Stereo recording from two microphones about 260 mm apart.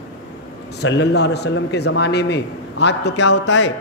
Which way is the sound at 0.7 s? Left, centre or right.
Left.